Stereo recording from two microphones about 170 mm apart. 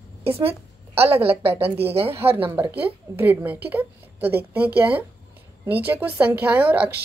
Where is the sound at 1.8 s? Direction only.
35° right (ahead or behind).